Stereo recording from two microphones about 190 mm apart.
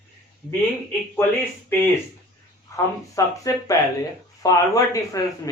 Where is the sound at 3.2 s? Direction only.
15° left (ahead or behind).